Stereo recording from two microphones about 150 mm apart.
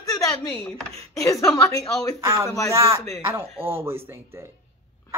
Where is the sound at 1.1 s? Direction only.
20° left (ahead or behind).